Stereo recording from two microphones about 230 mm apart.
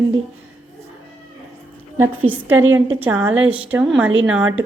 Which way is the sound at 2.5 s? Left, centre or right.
Right.